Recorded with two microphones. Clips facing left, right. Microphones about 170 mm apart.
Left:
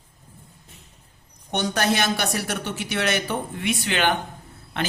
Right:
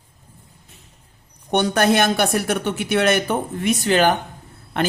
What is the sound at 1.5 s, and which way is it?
Speech, 55° right (ahead or behind).